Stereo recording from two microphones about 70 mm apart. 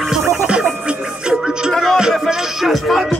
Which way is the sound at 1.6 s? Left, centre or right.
Centre.